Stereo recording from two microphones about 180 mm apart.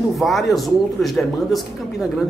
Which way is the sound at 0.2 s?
Centre (ahead or behind).